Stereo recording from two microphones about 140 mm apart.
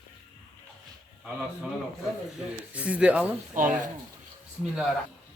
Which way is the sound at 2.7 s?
10° right (ahead or behind).